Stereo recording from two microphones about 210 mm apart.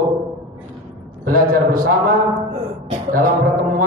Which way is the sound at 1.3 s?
45° right (ahead or behind).